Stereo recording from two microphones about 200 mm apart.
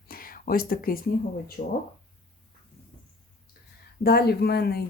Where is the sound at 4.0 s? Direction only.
50° left (ahead or behind).